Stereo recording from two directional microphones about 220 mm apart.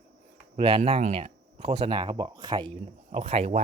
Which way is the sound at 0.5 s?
25° right (ahead or behind).